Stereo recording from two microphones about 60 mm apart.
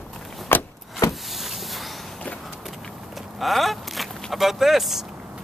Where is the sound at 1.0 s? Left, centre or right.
Left.